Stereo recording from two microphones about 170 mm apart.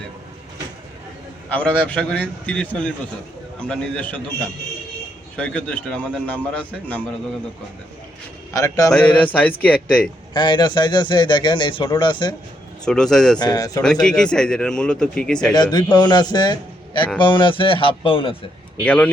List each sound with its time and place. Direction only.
1.5 s a man's voice: 10° left (ahead or behind)
8.5 s a man's voice: 20° left (ahead or behind)
8.9 s a man's voice: 10° left (ahead or behind)
10.3 s a man's voice: 25° left (ahead or behind)
12.8 s speech: 5° left (ahead or behind)
13.4 s a man's voice: 20° left (ahead or behind)
13.8 s speech: 5° left (ahead or behind)
15.5 s a man's voice: 25° left (ahead or behind)
18.8 s a man's voice: 5° left (ahead or behind)